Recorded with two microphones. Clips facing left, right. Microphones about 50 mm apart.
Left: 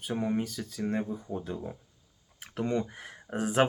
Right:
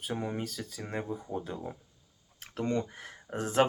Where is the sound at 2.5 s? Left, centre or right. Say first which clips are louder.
Left 1 dB; centre.